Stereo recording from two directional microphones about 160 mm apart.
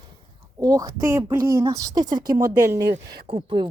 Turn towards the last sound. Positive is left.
turn(degrees=-30)  # may be behind; listen again after turning